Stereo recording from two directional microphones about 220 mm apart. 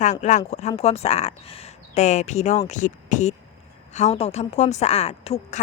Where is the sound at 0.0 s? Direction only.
35° left (ahead or behind).